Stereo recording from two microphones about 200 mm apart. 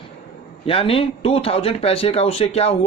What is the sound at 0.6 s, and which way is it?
Speech, 25° left (ahead or behind).